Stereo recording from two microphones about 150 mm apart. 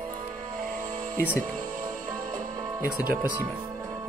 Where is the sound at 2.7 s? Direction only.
15° right (ahead or behind).